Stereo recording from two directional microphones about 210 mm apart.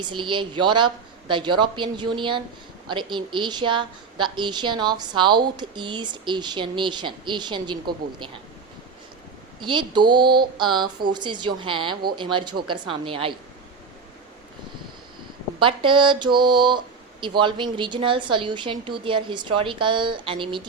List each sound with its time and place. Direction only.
0.0 s speech: 20° right (ahead or behind)
9.6 s speech: 20° right (ahead or behind)
15.5 s speech: 25° right (ahead or behind)